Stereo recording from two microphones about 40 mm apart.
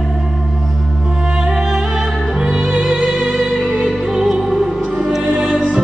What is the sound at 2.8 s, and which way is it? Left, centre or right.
Music, centre.